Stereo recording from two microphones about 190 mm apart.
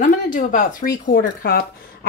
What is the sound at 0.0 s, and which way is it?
Speech, 45° left (ahead or behind).